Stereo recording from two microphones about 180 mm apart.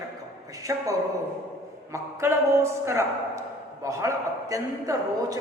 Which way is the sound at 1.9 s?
15° right (ahead or behind).